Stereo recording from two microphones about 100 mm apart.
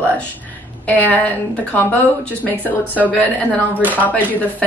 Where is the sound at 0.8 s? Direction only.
15° left (ahead or behind).